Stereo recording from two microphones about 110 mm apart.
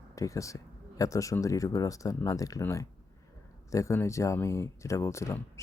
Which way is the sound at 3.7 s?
30° left (ahead or behind).